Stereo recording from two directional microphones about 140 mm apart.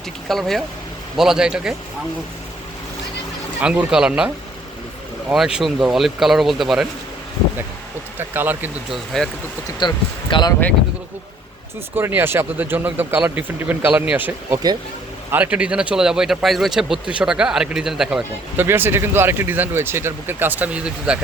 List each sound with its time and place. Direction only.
0.3 s speech: centre (ahead or behind)
3.6 s speech: 5° right (ahead or behind)
5.3 s speech: 5° right (ahead or behind)
8.3 s speech: 15° right (ahead or behind)
8.9 s speech: centre (ahead or behind)
9.7 s speech: 35° left (ahead or behind)
11.9 s speech: 15° right (ahead or behind)
18.5 s speech: 15° right (ahead or behind)